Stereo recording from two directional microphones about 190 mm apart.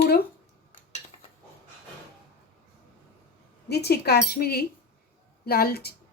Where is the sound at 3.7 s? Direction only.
60° left (ahead or behind).